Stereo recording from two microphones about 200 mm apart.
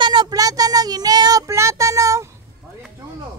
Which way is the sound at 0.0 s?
20° right (ahead or behind).